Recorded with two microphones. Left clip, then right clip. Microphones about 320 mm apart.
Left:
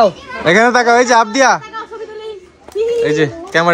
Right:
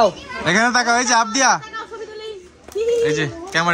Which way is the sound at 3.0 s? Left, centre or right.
Centre.